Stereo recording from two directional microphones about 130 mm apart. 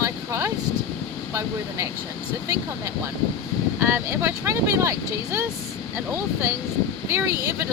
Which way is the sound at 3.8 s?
20° right (ahead or behind).